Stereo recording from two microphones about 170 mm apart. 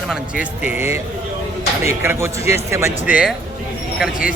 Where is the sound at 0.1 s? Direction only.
5° right (ahead or behind).